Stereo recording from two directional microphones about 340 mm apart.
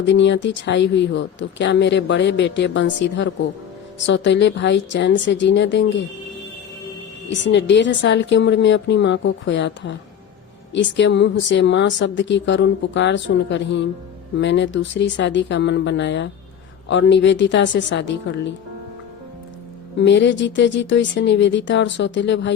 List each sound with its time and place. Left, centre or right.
0.0 s speech: left
7.3 s speech: left
20.0 s speech: left